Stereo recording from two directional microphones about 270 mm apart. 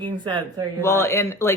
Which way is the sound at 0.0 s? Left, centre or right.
Centre.